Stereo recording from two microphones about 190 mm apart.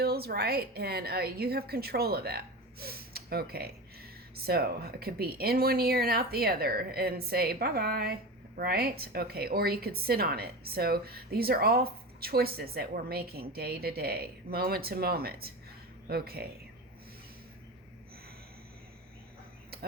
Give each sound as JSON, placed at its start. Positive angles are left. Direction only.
{"t": 0.0, "sound": "a woman's voice", "side_deg": -55}